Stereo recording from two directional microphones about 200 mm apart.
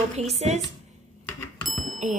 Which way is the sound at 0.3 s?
35° right (ahead or behind).